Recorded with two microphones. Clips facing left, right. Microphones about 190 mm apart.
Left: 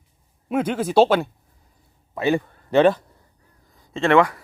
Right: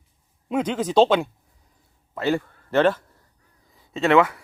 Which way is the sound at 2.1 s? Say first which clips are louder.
Left 2 dB; 15° left (ahead or behind).